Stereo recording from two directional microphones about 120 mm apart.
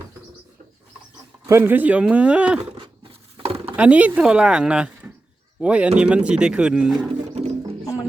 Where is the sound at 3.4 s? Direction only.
55° right (ahead or behind).